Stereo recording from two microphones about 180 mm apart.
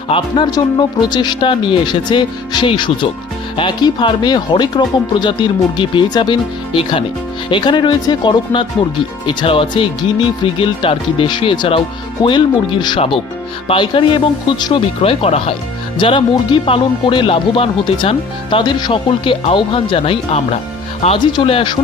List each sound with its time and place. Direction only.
0.1 s speech: 25° left (ahead or behind)